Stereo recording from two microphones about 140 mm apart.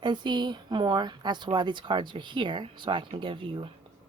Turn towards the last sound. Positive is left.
turn(degrees=-35)  # may be behind; listen again after turning